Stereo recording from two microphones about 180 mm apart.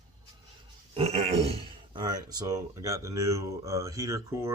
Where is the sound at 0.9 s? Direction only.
35° right (ahead or behind).